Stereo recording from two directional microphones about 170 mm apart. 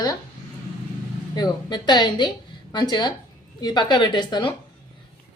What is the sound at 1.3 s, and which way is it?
A woman's voice, 25° left (ahead or behind).